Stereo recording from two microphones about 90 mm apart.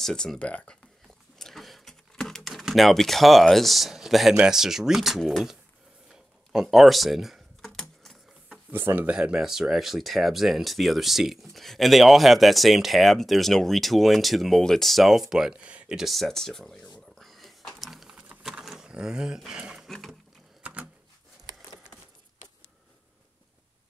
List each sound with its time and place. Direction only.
0.0 s speech: 5° left (ahead or behind)
1.0 s speech: centre (ahead or behind)
6.5 s typing: 5° right (ahead or behind)
8.7 s speech: 25° right (ahead or behind)
9.1 s speech: 10° right (ahead or behind)
17.2 s a sound: centre (ahead or behind)
19.9 s speech: centre (ahead or behind)
20.6 s a sound: 15° right (ahead or behind)